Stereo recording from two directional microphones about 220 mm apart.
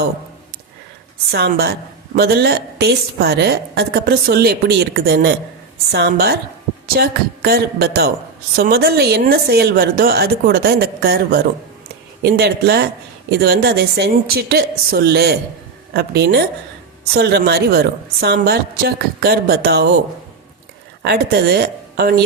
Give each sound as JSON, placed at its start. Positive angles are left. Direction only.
{"t": 1.3, "sound": "a woman's voice", "side_deg": -45}
{"t": 21.0, "sound": "a woman's voice", "side_deg": -45}